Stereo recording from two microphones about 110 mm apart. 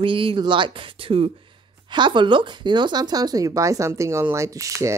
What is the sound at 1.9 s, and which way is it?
Speech, 45° right (ahead or behind).